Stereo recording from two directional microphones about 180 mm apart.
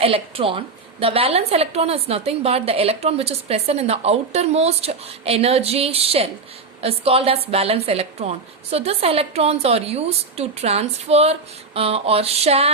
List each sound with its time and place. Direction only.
0.0 s a woman's voice: 30° right (ahead or behind)